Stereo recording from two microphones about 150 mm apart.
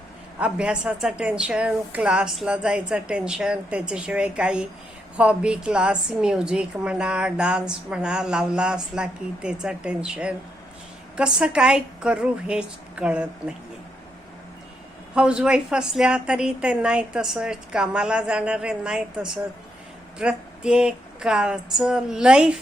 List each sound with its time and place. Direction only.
0.3 s a woman's voice: 5° right (ahead or behind)
15.1 s a woman's voice: 5° right (ahead or behind)